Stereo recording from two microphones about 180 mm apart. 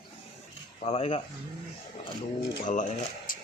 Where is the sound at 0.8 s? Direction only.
35° left (ahead or behind).